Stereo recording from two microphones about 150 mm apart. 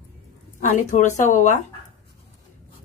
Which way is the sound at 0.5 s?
55° left (ahead or behind).